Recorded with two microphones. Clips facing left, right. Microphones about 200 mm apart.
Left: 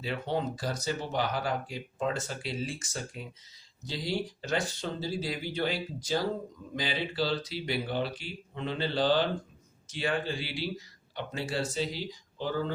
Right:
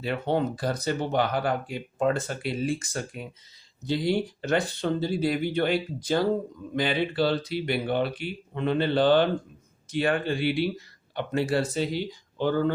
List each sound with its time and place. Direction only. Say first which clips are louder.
0.0 s speech: right 6 dB; 60° right (ahead or behind)